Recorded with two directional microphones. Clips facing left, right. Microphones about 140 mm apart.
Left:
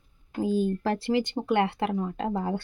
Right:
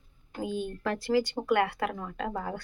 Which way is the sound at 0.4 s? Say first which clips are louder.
Left 6 dB; 35° left (ahead or behind).